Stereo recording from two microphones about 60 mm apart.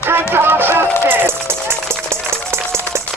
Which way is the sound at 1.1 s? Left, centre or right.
Right.